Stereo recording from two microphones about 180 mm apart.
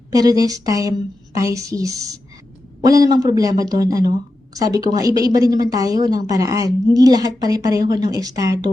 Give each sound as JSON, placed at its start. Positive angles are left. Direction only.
{"t": 0.1, "sound": "a woman's voice", "side_deg": -20}